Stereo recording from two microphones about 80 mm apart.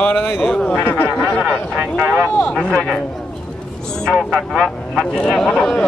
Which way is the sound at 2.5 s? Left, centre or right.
Centre.